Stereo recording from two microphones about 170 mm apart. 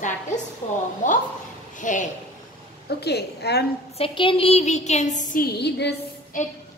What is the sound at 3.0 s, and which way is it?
Speech, 75° left (ahead or behind).